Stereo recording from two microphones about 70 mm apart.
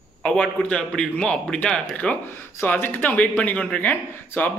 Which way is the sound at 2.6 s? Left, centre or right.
Left.